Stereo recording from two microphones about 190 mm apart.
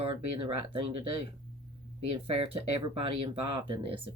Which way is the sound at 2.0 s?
30° right (ahead or behind).